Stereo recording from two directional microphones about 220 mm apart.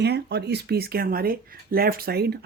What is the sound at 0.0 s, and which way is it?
Speech, 50° right (ahead or behind).